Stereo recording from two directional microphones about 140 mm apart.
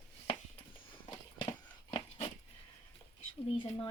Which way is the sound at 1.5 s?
40° left (ahead or behind).